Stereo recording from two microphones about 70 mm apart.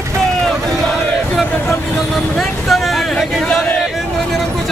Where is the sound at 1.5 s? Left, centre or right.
Left.